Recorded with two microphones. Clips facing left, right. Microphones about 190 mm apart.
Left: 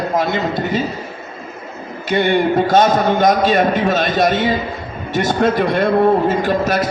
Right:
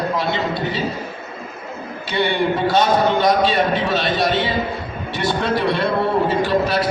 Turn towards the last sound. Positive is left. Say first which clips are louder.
# left 1 dB
turn(degrees=45)  # may be behind; listen again after turning